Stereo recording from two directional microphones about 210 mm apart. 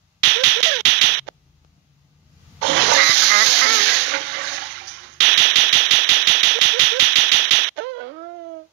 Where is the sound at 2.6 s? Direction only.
55° right (ahead or behind).